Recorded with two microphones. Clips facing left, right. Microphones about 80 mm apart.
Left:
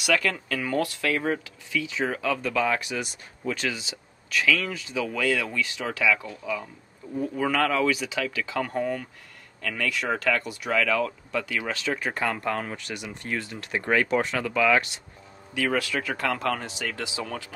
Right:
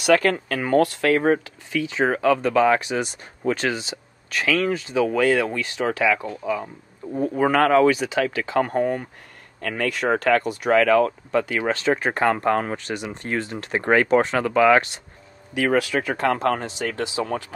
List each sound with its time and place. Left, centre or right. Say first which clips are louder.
0.0 s speech: right 7 dB; right
2.8 s speech: right 6 dB; right
3.4 s speech: right 6 dB; right
15.5 s speech: right 6 dB; right